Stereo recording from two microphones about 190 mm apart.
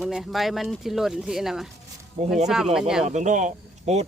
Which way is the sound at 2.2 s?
35° right (ahead or behind).